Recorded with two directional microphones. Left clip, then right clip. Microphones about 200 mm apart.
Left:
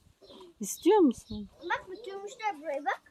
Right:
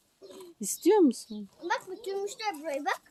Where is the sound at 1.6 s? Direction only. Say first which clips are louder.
Right 2 dB; 45° right (ahead or behind); by 2.9 s 65° right (ahead or behind).